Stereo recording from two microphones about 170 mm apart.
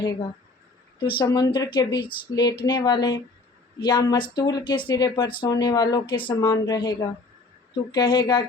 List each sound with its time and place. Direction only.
1.2 s speech: 25° left (ahead or behind)